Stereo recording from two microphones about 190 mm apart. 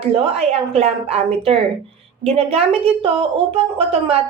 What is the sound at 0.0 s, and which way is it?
Speech, 30° right (ahead or behind).